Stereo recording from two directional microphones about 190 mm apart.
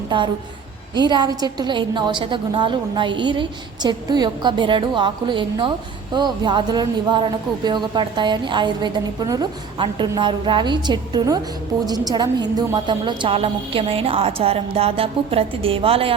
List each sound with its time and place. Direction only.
0.1 s speech: 25° right (ahead or behind)